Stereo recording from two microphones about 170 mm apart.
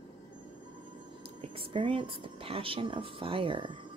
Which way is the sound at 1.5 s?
30° right (ahead or behind).